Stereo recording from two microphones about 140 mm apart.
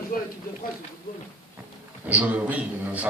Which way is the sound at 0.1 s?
90° left.